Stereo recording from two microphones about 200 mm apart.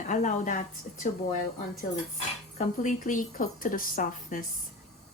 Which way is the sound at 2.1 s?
40° left (ahead or behind).